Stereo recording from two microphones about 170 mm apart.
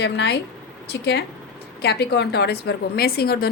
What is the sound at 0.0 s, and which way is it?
Speech, 90° left.